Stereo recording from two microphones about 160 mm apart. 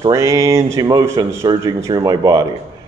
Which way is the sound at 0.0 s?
20° right (ahead or behind).